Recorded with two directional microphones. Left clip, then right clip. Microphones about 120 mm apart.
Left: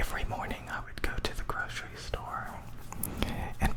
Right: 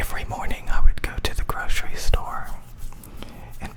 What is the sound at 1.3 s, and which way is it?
Whispering, 40° right (ahead or behind).